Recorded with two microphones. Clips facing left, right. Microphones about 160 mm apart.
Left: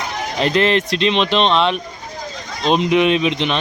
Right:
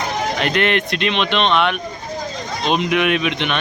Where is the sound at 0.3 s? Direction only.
30° left (ahead or behind).